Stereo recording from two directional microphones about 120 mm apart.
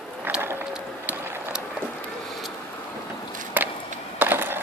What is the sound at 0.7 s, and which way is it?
Boat, 15° right (ahead or behind).